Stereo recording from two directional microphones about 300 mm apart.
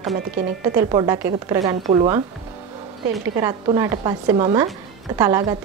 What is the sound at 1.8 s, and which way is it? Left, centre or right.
Speech, right.